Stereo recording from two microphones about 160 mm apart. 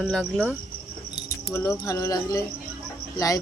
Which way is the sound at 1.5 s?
15° left (ahead or behind).